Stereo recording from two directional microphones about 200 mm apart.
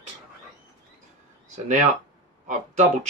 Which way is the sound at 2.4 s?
40° right (ahead or behind).